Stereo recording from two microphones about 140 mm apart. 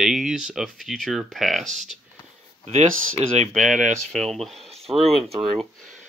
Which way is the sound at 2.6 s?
50° right (ahead or behind).